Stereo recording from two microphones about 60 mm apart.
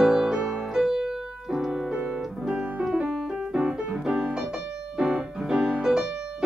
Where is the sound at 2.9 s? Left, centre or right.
Centre.